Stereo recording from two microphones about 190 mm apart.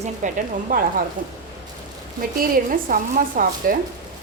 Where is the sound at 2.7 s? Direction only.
45° right (ahead or behind).